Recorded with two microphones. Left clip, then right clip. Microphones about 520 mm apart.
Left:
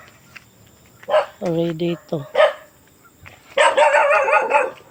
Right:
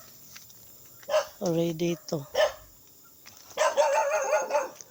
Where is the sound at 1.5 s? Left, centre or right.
Right.